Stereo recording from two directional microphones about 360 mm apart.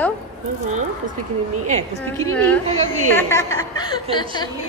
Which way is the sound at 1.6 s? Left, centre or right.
Centre.